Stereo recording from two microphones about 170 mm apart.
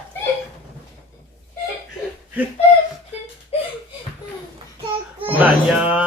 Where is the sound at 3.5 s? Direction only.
35° left (ahead or behind).